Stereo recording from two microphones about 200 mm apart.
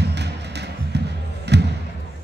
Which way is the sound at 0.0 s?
55° right (ahead or behind).